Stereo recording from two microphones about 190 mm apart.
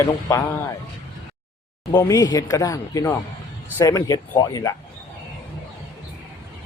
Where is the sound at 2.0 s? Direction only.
15° left (ahead or behind).